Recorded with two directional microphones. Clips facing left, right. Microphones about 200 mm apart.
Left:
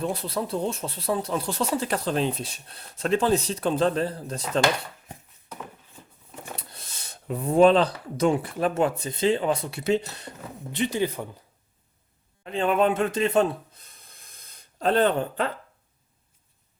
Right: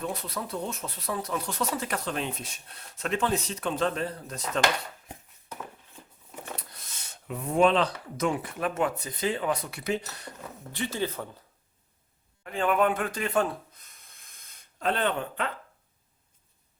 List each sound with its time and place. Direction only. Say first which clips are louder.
0.0 s speech: left 5 dB; 30° left (ahead or behind)
6.6 s speech: left 3 dB; 30° left (ahead or behind); by 11.3 s 15° left (ahead or behind)
12.4 s speech: left 3 dB; 25° left (ahead or behind)